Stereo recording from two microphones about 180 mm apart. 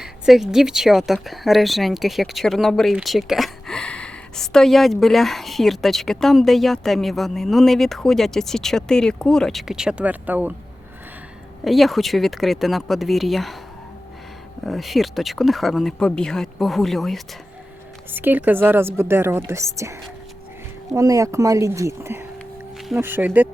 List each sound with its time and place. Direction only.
0.0 s speech: 5° right (ahead or behind)
11.6 s speech: centre (ahead or behind)
14.6 s speech: centre (ahead or behind)
18.1 s speech: 10° right (ahead or behind)